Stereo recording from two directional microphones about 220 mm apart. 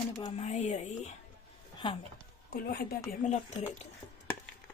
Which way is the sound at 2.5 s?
45° left (ahead or behind).